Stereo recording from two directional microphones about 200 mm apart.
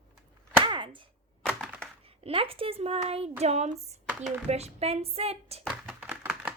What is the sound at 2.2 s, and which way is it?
Speech, 25° right (ahead or behind).